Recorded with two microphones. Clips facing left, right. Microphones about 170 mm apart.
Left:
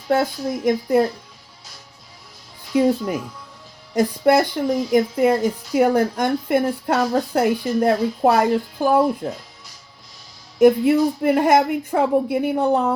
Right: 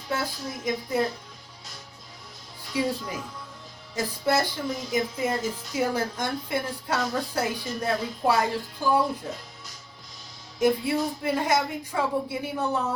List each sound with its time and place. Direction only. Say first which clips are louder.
0.1 s speech: left 11 dB; 55° left (ahead or behind)
2.7 s speech: left 10 dB; 55° left (ahead or behind)
3.9 s speech: left 9 dB; 60° left (ahead or behind)
10.6 s speech: left 10 dB; 55° left (ahead or behind)